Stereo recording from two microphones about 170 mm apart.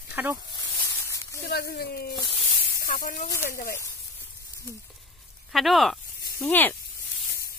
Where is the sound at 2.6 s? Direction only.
60° left (ahead or behind).